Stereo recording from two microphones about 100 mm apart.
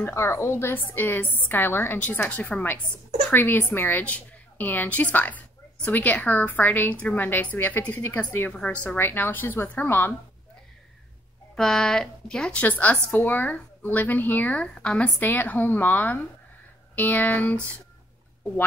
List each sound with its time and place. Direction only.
0.0 s a woman's voice: 25° left (ahead or behind)
11.5 s speech: 5° left (ahead or behind)